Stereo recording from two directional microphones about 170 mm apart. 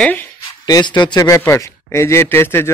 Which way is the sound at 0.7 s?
25° left (ahead or behind).